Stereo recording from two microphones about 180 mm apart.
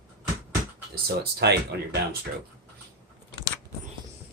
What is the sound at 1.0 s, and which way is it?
Speech, 65° right (ahead or behind).